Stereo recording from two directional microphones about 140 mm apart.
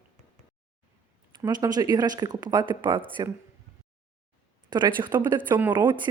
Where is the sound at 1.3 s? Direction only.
30° right (ahead or behind).